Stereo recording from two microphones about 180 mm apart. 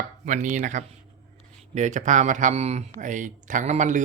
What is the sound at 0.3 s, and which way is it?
Speech, 45° right (ahead or behind).